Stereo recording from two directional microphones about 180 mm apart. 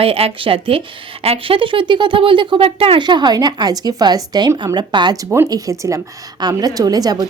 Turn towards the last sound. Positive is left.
turn(degrees=-20)  # may be behind; listen again after turning